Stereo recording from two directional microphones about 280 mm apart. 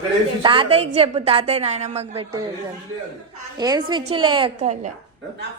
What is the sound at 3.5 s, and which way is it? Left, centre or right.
A woman's voice, centre.